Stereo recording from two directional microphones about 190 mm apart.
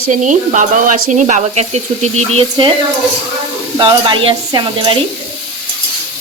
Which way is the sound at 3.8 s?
25° right (ahead or behind).